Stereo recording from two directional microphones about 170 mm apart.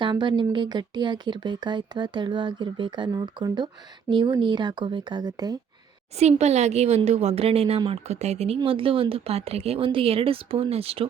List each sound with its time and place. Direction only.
0.0 s speech: 25° right (ahead or behind)
6.1 s speech: 40° right (ahead or behind)